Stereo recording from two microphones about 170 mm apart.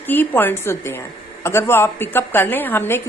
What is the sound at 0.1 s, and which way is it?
A woman's voice, 10° left (ahead or behind).